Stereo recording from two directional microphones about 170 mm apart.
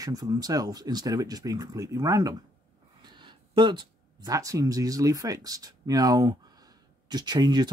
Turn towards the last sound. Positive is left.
turn(degrees=-25)  # may be behind; listen again after turning